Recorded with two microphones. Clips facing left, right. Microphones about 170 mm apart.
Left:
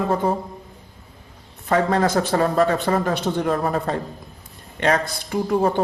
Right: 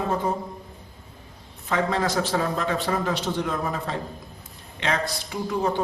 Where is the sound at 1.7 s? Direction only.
50° left (ahead or behind).